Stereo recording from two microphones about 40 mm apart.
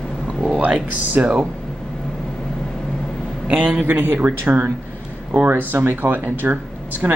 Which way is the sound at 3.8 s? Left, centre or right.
Right.